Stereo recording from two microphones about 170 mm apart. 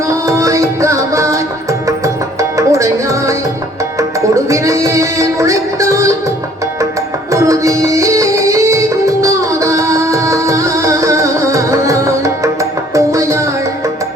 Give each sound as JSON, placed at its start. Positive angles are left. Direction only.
{"t": 0.3, "sound": "music", "side_deg": -20}
{"t": 2.4, "sound": "music", "side_deg": -20}
{"t": 4.4, "sound": "music", "side_deg": -20}
{"t": 7.3, "sound": "music", "side_deg": -20}